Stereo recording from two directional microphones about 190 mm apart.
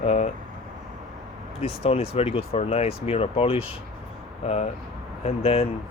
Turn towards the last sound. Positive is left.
turn(degrees=30)  # may be behind; listen again after turning